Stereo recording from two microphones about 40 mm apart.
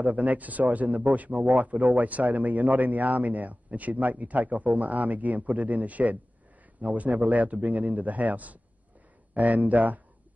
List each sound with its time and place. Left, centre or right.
0.0 s speech: right